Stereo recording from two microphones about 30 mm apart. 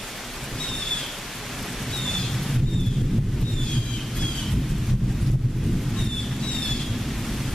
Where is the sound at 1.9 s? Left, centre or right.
Centre.